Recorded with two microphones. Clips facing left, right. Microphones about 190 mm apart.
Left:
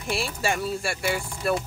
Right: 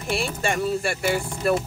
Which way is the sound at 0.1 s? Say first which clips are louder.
Right 2 dB; centre (ahead or behind).